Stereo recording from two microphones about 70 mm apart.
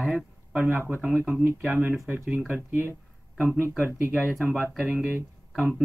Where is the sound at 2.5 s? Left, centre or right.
Right.